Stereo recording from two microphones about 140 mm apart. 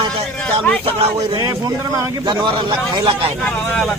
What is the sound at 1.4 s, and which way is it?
A man's voice, 25° right (ahead or behind).